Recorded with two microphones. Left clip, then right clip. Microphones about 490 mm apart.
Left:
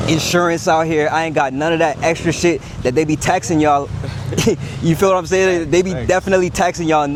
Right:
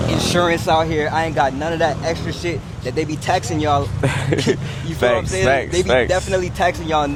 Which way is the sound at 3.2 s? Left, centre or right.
Left.